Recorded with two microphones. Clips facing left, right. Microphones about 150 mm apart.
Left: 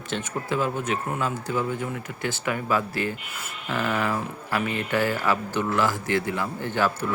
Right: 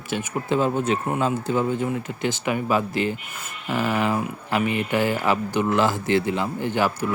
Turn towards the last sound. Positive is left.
turn(degrees=-15)  # may be behind; listen again after turning